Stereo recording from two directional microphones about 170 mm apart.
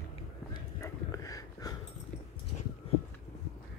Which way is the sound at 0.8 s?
20° left (ahead or behind).